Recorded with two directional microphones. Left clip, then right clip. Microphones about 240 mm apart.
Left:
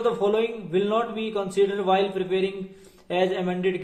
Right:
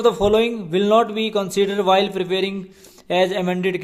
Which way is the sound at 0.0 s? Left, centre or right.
Right.